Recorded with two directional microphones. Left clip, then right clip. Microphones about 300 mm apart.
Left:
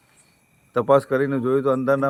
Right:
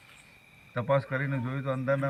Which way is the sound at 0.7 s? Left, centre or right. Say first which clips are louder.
Left 11 dB; left.